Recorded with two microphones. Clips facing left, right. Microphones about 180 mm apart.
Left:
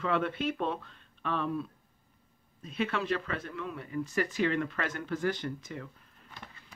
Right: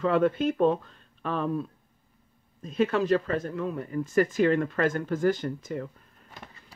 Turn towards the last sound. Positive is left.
turn(degrees=-45)  # may be behind; listen again after turning